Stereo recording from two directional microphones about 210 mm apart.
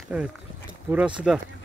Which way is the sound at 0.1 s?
10° right (ahead or behind).